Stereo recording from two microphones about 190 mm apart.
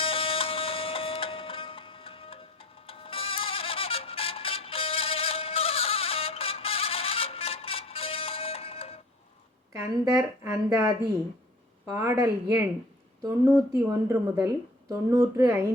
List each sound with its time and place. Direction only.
0.0 s music: 30° left (ahead or behind)
9.7 s a woman's voice: 15° right (ahead or behind)
13.8 s a woman's voice: 15° right (ahead or behind)